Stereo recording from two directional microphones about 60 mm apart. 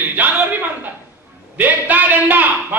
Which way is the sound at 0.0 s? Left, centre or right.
Right.